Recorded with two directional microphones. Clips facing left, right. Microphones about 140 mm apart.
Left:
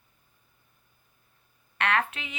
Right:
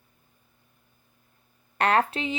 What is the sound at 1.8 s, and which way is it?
Speech, 35° right (ahead or behind).